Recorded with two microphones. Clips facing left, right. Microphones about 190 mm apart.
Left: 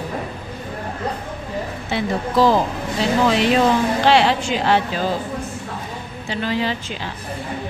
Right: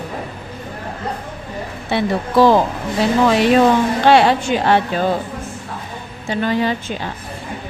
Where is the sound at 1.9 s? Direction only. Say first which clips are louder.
Right 4 dB; 60° right (ahead or behind).